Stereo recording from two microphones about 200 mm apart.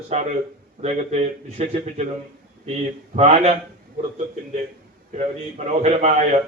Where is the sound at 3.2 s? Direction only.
30° right (ahead or behind).